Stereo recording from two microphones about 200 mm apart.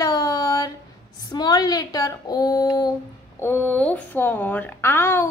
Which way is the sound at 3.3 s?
10° left (ahead or behind).